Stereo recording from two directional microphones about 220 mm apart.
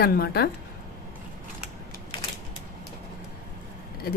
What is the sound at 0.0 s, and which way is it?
Speech, 45° left (ahead or behind).